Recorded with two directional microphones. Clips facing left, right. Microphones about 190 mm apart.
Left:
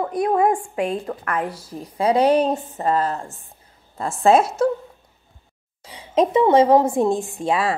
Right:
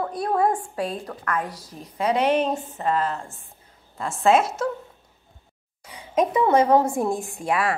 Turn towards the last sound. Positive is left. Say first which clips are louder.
# left 3 dB
turn(degrees=25)  # may be behind; listen again after turning